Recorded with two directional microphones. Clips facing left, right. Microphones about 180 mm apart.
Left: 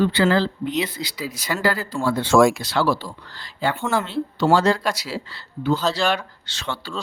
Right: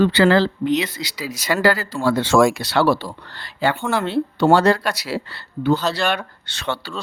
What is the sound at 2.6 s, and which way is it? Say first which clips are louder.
Speech: right 4 dB; 65° right (ahead or behind).